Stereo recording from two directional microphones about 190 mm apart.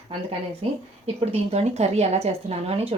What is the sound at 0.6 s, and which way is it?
A woman's voice, 30° right (ahead or behind).